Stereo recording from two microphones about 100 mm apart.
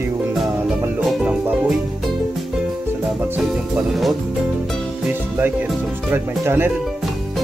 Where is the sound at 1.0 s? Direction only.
Centre (ahead or behind).